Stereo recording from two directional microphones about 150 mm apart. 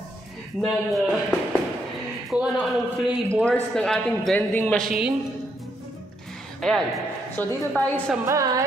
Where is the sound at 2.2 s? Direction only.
5° right (ahead or behind).